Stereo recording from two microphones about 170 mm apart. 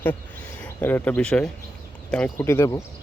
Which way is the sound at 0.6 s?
10° left (ahead or behind).